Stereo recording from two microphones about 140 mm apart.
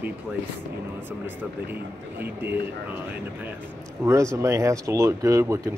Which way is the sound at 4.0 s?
20° right (ahead or behind).